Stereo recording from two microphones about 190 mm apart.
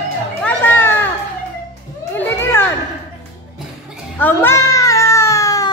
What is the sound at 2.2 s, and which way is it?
Children playing, 10° left (ahead or behind).